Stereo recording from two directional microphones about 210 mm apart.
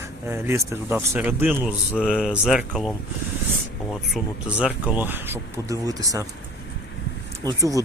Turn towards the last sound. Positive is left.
turn(degrees=-15)  # may be behind; listen again after turning